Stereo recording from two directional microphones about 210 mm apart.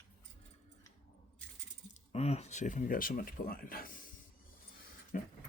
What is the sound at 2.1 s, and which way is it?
Speech, 30° left (ahead or behind).